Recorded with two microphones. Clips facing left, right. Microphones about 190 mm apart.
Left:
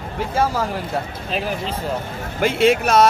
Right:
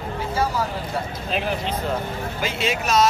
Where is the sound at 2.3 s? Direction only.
60° left (ahead or behind).